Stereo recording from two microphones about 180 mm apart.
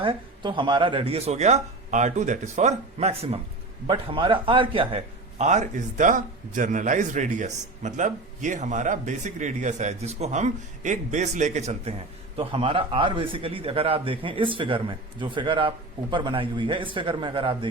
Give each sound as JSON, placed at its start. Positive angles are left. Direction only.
{"t": 0.0, "sound": "a man's voice", "side_deg": -30}